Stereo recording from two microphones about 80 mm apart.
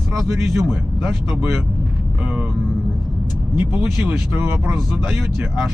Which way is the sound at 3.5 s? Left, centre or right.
Centre.